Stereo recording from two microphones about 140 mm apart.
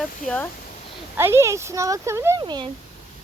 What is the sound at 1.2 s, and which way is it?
Speech, 20° right (ahead or behind).